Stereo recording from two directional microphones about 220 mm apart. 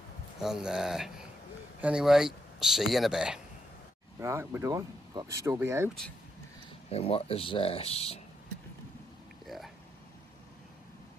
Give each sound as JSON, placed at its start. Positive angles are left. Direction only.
{"t": 0.4, "sound": "speech", "side_deg": 0}
{"t": 6.9, "sound": "speech", "side_deg": 25}